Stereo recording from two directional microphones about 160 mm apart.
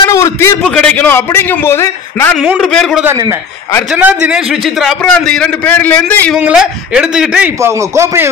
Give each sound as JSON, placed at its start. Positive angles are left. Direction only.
{"t": 0.1, "sound": "a sound", "side_deg": 20}
{"t": 0.7, "sound": "a man's voice", "side_deg": 5}
{"t": 2.3, "sound": "a man's voice", "side_deg": 0}
{"t": 6.3, "sound": "a man's voice", "side_deg": -5}